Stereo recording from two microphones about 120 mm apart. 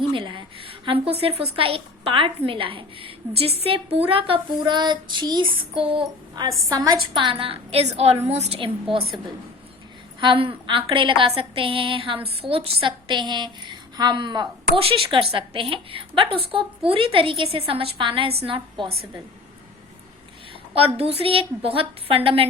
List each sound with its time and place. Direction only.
0.1 s a woman's voice: 40° right (ahead or behind)
6.7 s a woman's voice: 35° right (ahead or behind)
20.7 s a woman's voice: 55° right (ahead or behind)